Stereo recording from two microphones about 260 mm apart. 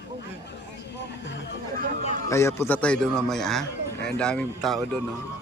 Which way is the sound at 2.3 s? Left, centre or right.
Centre.